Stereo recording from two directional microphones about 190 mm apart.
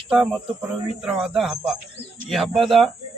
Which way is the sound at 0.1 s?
5° right (ahead or behind).